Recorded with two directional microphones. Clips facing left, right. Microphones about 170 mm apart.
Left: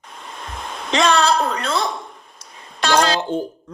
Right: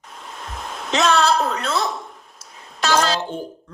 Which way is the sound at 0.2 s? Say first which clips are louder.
Left 1 dB; centre (ahead or behind).